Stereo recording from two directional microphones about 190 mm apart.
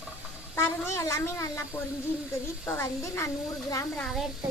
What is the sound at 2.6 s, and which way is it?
A woman's voice, 15° left (ahead or behind).